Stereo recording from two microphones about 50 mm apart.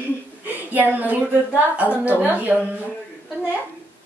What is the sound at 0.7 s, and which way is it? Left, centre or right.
A woman's voice, right.